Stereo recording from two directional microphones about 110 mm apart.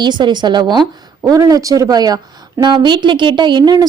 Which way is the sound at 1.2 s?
30° right (ahead or behind).